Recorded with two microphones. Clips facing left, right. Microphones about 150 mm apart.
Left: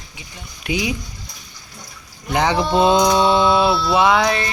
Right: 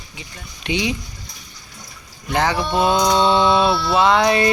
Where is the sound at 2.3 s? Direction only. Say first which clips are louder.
Left 2 dB; 20° left (ahead or behind).